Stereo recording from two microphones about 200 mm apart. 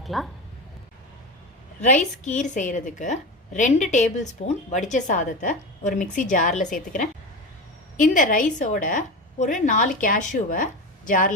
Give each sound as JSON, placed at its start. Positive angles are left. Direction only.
{"t": 0.0, "sound": "speech", "side_deg": 0}
{"t": 1.8, "sound": "a woman's voice", "side_deg": 35}
{"t": 7.9, "sound": "a woman's voice", "side_deg": 40}